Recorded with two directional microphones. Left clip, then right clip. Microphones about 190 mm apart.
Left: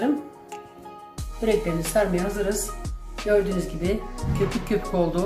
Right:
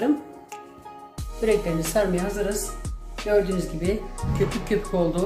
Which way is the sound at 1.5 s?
15° right (ahead or behind).